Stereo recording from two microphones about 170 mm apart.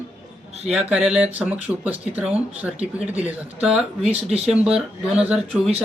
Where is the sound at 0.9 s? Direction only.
5° right (ahead or behind).